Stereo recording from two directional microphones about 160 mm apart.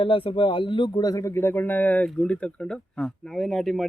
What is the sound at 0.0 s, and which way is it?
Speech, 35° left (ahead or behind).